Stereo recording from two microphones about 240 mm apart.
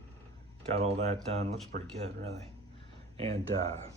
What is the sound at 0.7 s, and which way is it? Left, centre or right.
Speech, right.